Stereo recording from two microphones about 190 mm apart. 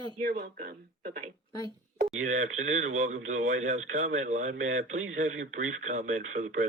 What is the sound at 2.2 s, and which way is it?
Speech, 40° right (ahead or behind).